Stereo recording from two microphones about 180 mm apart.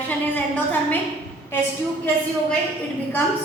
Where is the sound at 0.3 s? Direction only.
10° left (ahead or behind).